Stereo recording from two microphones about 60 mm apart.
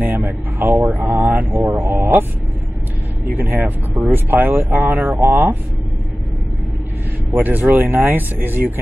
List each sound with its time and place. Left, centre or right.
0.0 s speech: right
3.3 s speech: right
7.3 s speech: right